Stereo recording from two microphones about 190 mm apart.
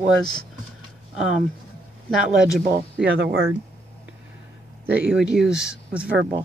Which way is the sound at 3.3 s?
90° right.